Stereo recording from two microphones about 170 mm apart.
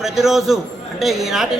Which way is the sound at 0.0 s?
Centre (ahead or behind).